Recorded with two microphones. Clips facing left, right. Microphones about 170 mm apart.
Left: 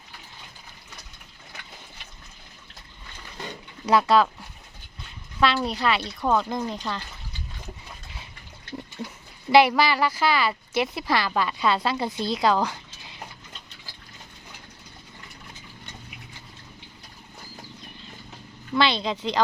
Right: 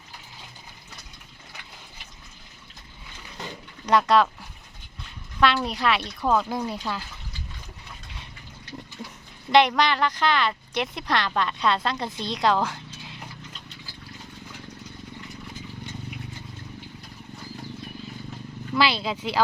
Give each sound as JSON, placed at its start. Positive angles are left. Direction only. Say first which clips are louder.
{"t": 3.8, "sound": "speech", "louder": "even", "side_deg": 5}
{"t": 9.5, "sound": "speech", "louder": "left 1 dB", "side_deg": 5}
{"t": 18.8, "sound": "speech", "louder": "left 1 dB", "side_deg": -5}